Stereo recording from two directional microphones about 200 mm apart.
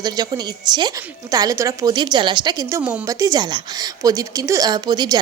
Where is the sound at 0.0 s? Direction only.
20° right (ahead or behind).